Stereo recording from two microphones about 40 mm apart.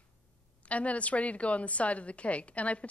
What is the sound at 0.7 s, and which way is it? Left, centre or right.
A woman's voice, left.